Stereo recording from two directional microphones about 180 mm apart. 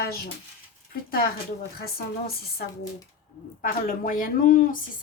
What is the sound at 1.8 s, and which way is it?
A woman's voice, 55° left (ahead or behind).